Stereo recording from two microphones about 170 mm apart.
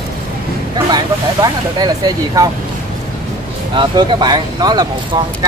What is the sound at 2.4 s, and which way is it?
Speech, 20° right (ahead or behind).